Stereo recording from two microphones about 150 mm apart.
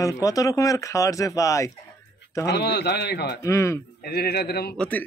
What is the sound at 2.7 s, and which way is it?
Speech, 90° left.